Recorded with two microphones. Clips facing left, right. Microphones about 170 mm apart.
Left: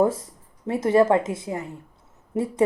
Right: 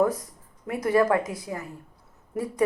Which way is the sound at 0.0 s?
25° left (ahead or behind).